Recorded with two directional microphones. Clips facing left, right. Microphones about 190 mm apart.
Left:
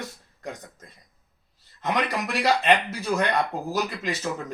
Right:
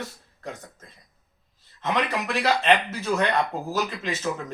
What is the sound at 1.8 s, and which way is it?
Speech, 10° left (ahead or behind).